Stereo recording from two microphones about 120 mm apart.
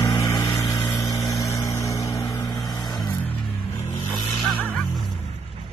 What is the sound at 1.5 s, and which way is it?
Vehicle, 25° left (ahead or behind).